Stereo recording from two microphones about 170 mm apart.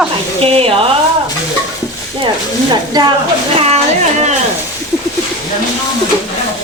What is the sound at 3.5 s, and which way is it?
Speech, 35° right (ahead or behind).